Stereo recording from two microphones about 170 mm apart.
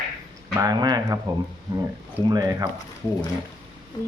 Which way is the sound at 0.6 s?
20° right (ahead or behind).